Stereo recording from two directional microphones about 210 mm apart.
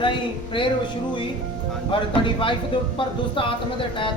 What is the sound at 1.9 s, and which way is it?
Speech, 25° left (ahead or behind).